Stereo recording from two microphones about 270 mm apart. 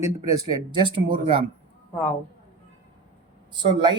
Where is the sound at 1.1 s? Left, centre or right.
Right.